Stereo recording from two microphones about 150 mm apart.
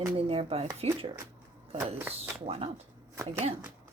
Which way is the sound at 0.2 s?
40° right (ahead or behind).